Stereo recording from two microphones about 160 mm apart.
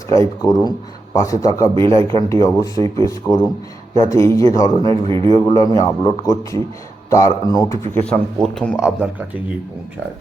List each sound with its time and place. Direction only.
0.1 s a man's voice: 20° left (ahead or behind)
5.0 s a man's voice: 30° right (ahead or behind)
5.3 s a man's voice: 20° left (ahead or behind)
8.0 s speech: 5° left (ahead or behind)